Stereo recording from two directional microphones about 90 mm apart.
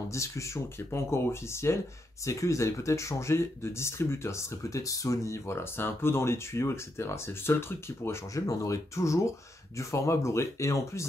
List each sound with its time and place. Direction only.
0.1 s speech: 35° left (ahead or behind)